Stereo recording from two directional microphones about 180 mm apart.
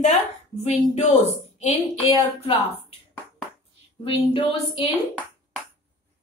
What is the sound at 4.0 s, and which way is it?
Speech, 30° left (ahead or behind).